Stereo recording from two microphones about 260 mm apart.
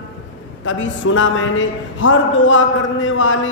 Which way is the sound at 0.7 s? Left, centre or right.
Left.